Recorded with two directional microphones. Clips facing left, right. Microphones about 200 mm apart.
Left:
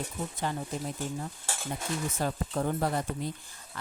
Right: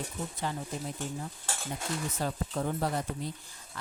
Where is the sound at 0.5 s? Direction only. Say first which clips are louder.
Left 2 dB; 50° left (ahead or behind).